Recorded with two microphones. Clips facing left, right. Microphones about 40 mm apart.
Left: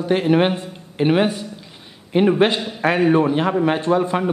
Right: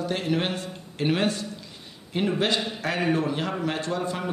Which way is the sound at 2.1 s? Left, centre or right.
Left.